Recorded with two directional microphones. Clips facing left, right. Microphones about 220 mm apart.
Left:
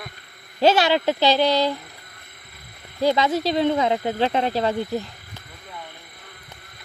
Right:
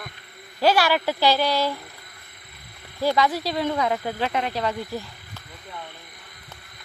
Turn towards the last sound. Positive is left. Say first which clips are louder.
# left 4 dB
turn(degrees=25)  # may be behind; listen again after turning